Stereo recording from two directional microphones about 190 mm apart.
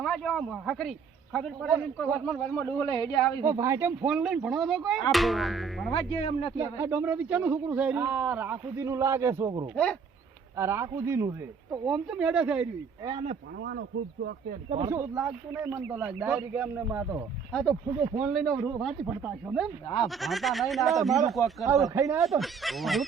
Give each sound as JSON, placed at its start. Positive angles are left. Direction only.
{"t": 0.0, "sound": "a man's voice", "side_deg": 0}
{"t": 3.4, "sound": "a man's voice", "side_deg": -15}
{"t": 5.9, "sound": "speech", "side_deg": 30}
{"t": 6.6, "sound": "a man's voice", "side_deg": -15}
{"t": 9.7, "sound": "a man's voice", "side_deg": 5}
{"t": 10.6, "sound": "a man's voice", "side_deg": -15}
{"t": 11.9, "sound": "a man's voice", "side_deg": -5}
{"t": 13.6, "sound": "speech", "side_deg": -70}
{"t": 14.8, "sound": "a man's voice", "side_deg": -15}
{"t": 17.5, "sound": "a man's voice", "side_deg": 5}
{"t": 21.8, "sound": "a man's voice", "side_deg": -15}
{"t": 22.2, "sound": "a man's voice", "side_deg": 0}